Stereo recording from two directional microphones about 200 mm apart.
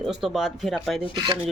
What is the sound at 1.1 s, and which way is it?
Rub, 20° right (ahead or behind).